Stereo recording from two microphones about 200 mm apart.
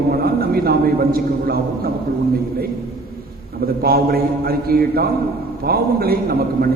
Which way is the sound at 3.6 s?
50° right (ahead or behind).